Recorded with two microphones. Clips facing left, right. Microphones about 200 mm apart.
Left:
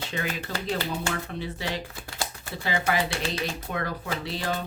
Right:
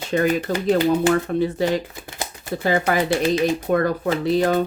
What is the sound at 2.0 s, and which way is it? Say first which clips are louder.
Shuffling cards: right 3 dB; 20° right (ahead or behind).